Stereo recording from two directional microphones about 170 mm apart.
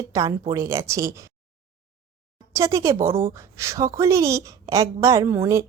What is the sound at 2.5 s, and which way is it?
Speech, 15° right (ahead or behind).